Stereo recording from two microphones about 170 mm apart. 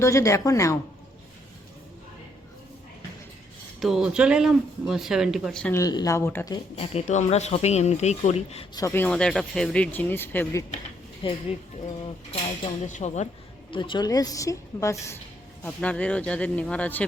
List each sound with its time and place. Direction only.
0.0 s speech: 15° left (ahead or behind)
3.8 s speech: centre (ahead or behind)
5.7 s a woman's voice: 20° left (ahead or behind)
6.5 s speech: 35° left (ahead or behind)
8.7 s speech: 15° left (ahead or behind)
11.2 s speech: 35° left (ahead or behind)
12.8 s speech: 45° left (ahead or behind)
13.7 s a woman's voice: 30° left (ahead or behind); by 17.1 s 10° left (ahead or behind)